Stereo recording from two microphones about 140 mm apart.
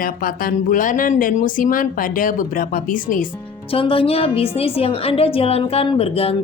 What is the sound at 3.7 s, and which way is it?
A woman's voice, 40° left (ahead or behind).